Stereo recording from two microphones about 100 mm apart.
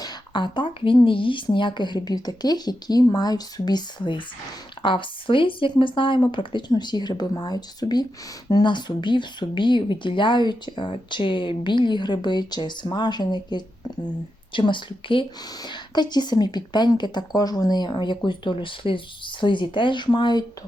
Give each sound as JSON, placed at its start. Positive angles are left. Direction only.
{"t": 0.0, "sound": "a woman's voice", "side_deg": 50}